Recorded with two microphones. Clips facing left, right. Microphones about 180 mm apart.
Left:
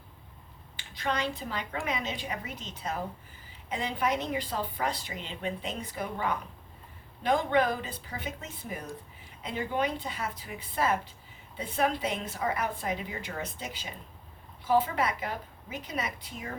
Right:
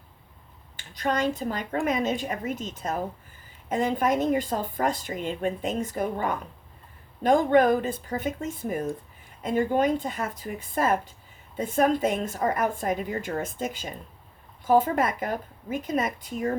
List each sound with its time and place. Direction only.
0.8 s a woman's voice: 45° right (ahead or behind)